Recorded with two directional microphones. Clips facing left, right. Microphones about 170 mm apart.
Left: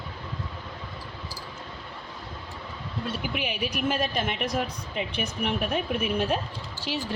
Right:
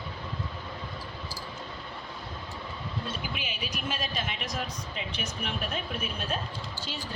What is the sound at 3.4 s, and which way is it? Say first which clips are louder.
Speech: left 8 dB; 60° left (ahead or behind).